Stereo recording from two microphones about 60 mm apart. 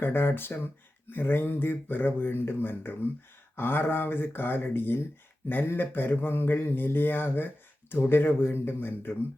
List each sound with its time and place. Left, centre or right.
0.0 s speech: left